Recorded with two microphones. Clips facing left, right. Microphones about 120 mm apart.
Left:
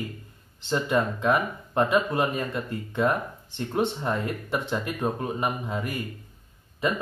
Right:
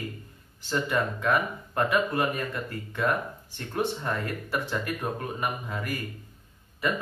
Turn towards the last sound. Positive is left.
turn(degrees=20)  # may be behind; listen again after turning